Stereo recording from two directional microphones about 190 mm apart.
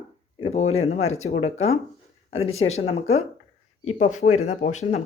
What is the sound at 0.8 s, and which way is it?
Speech, 35° left (ahead or behind).